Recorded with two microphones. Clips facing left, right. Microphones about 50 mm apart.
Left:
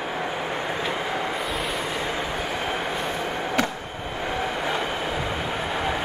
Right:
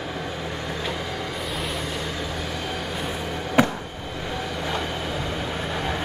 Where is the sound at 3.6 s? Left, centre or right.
Centre.